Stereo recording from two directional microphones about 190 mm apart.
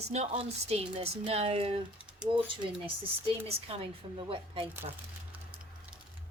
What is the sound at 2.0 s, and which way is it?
Typing, 5° right (ahead or behind).